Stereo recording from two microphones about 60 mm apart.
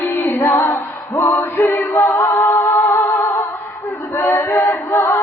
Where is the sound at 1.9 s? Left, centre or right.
Left.